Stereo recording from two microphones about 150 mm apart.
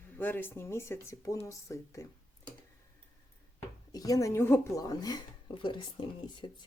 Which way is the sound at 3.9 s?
25° left (ahead or behind).